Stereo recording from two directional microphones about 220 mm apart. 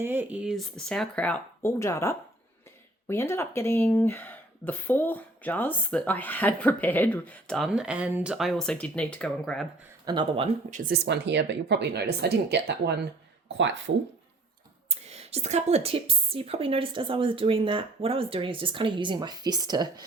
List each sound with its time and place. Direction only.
0.0 s speech: 10° right (ahead or behind)
10.1 s a woman's voice: 25° right (ahead or behind)
10.8 s speech: 45° right (ahead or behind)
14.8 s a woman's voice: 30° right (ahead or behind)